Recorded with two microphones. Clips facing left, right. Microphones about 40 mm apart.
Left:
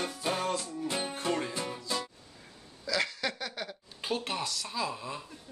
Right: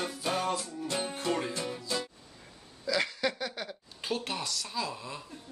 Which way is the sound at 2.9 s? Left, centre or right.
Centre.